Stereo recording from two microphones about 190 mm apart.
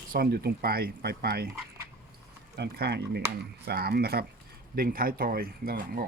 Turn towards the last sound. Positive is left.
turn(degrees=-50)  # may be behind; listen again after turning